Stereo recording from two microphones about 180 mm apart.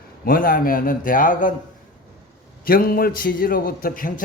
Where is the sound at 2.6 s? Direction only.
55° left (ahead or behind).